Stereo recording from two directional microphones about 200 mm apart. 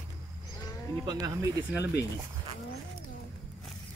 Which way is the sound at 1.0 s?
15° right (ahead or behind).